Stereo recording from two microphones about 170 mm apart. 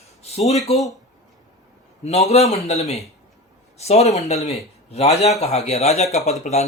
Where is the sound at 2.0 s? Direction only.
40° left (ahead or behind).